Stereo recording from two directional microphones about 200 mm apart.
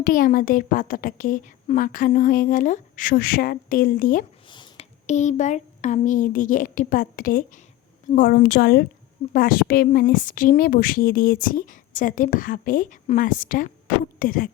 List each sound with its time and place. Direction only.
0.0 s speech: 45° left (ahead or behind)
4.4 s a sound: 25° left (ahead or behind)
5.0 s a woman's voice: 35° left (ahead or behind)